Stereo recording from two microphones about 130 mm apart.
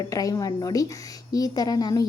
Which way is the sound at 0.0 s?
25° left (ahead or behind).